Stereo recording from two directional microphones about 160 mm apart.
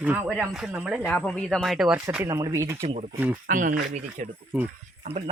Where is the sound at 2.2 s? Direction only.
20° right (ahead or behind).